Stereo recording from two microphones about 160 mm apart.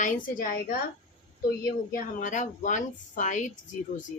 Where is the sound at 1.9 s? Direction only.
50° left (ahead or behind).